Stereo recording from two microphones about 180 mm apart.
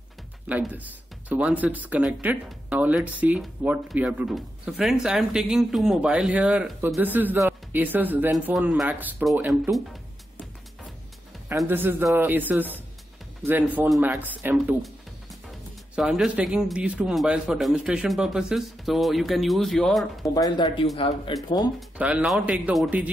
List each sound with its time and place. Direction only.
0.5 s speech: 10° right (ahead or behind)
11.4 s a man's voice: 10° right (ahead or behind)
16.0 s a man's voice: 5° right (ahead or behind)
20.3 s speech: 20° left (ahead or behind)
21.7 s speech: 5° right (ahead or behind)